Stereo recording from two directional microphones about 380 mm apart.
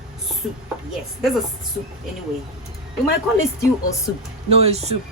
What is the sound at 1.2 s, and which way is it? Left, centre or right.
Speech, centre.